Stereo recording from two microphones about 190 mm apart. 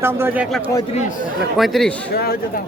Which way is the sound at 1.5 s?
Centre (ahead or behind).